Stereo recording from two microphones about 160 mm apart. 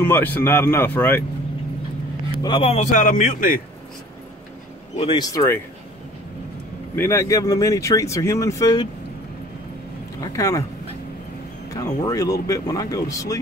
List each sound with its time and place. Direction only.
0.0 s speech: 10° left (ahead or behind)
2.4 s a man's voice: 35° left (ahead or behind); by 3.6 s 60° left (ahead or behind)
4.9 s speech: 30° left (ahead or behind)
7.0 s speech: 15° left (ahead or behind)
10.3 s speech: 20° left (ahead or behind)
11.7 s speech: 20° left (ahead or behind)